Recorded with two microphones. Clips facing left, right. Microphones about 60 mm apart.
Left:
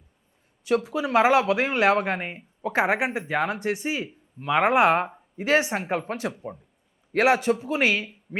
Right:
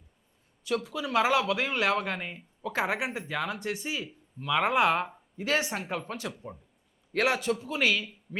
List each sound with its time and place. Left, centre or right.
0.8 s speech: left
6.3 s speech: centre
7.1 s speech: left